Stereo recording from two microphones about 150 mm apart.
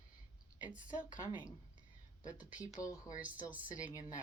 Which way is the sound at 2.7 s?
20° left (ahead or behind).